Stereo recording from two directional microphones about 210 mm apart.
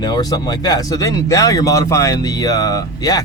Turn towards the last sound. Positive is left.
turn(degrees=20)  # may be behind; listen again after turning